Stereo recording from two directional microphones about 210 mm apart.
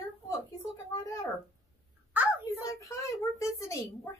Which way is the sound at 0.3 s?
15° left (ahead or behind).